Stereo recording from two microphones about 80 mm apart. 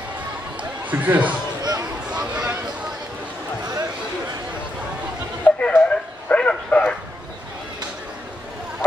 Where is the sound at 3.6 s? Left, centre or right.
Right.